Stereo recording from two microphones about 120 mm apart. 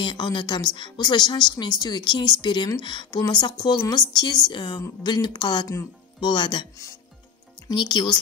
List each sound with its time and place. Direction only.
0.0 s speech: 40° left (ahead or behind)
7.7 s speech: 40° left (ahead or behind)